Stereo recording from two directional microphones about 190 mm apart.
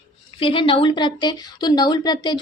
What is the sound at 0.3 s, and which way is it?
Speech, 25° left (ahead or behind).